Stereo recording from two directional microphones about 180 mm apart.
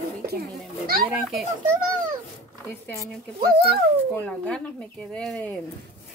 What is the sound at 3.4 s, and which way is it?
Speech, 60° right (ahead or behind).